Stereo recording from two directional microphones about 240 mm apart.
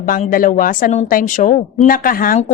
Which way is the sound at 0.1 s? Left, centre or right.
Left.